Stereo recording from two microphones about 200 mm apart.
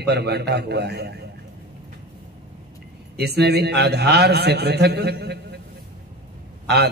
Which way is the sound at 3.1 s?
55° right (ahead or behind).